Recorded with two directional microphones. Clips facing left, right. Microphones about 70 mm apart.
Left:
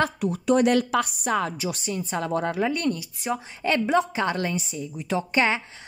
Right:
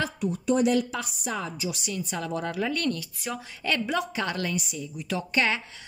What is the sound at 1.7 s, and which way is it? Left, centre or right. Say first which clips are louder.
A woman's voice: left 4 dB; left.